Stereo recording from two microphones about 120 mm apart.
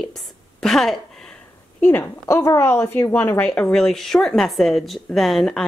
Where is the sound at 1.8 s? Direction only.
15° left (ahead or behind); by 5.6 s centre (ahead or behind).